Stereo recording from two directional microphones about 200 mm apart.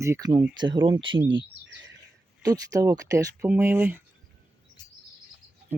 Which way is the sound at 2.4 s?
20° right (ahead or behind).